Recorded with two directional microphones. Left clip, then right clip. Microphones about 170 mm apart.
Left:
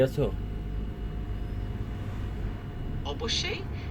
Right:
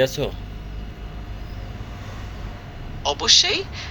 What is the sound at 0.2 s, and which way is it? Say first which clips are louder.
Speech: right 3 dB; centre (ahead or behind).